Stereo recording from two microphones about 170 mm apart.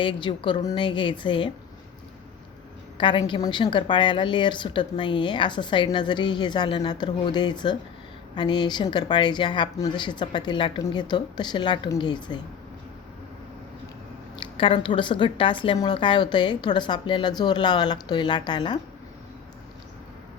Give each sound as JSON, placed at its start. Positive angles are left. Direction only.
{"t": 0.0, "sound": "a woman's voice", "side_deg": 30}
{"t": 3.0, "sound": "a woman's voice", "side_deg": 30}
{"t": 14.3, "sound": "a woman's voice", "side_deg": 30}